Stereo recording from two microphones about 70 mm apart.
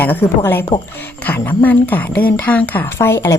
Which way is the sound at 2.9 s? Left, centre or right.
Left.